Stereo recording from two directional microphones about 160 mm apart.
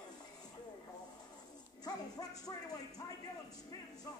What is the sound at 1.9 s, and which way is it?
Speech, 20° left (ahead or behind).